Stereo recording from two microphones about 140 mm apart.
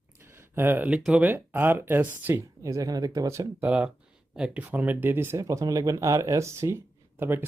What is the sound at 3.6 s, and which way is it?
Speech, 10° right (ahead or behind).